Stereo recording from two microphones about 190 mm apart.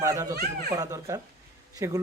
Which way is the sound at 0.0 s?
15° right (ahead or behind).